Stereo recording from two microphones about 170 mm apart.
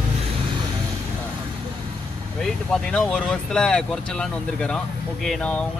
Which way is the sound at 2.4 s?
5° left (ahead or behind).